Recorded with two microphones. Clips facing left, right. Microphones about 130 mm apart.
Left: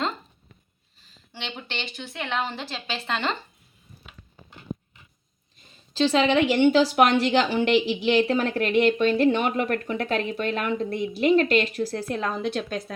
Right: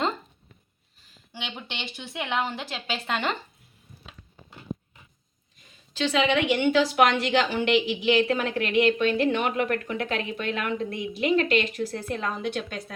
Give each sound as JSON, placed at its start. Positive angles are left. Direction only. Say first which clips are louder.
{"t": 1.3, "sound": "a woman's voice", "louder": "left 2 dB", "side_deg": -10}
{"t": 5.9, "sound": "speech", "louder": "left 3 dB", "side_deg": 30}